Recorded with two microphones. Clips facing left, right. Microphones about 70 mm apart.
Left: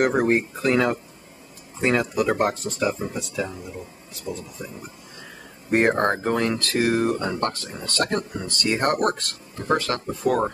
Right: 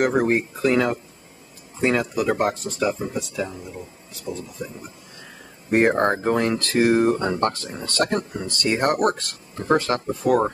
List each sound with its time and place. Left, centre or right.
0.0 s speech: centre
5.7 s speech: centre
5.9 s speech: centre
9.7 s speech: right
10.2 s speech: centre